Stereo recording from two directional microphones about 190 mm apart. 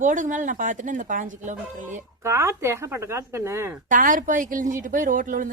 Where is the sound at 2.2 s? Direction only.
15° right (ahead or behind).